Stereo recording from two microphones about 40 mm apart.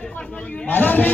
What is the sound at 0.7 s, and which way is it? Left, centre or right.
Speech, left.